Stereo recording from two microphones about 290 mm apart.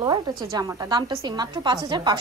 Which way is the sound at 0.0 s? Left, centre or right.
Centre.